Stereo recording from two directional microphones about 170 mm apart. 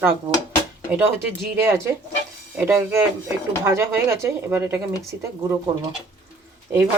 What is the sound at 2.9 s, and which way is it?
Speech, 15° right (ahead or behind).